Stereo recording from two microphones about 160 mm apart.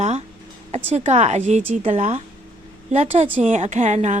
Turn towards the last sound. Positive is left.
turn(degrees=-50)  # may be behind; listen again after turning